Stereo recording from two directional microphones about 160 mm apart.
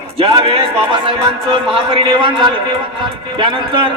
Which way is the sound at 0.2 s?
35° right (ahead or behind).